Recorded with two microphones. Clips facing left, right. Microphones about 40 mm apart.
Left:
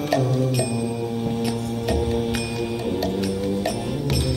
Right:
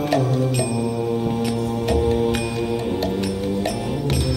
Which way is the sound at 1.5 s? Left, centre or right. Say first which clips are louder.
Right 3 dB; right.